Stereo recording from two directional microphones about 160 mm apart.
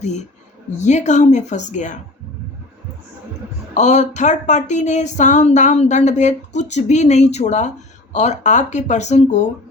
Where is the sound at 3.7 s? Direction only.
45° left (ahead or behind).